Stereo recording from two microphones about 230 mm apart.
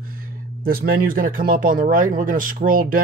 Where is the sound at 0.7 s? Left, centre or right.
Right.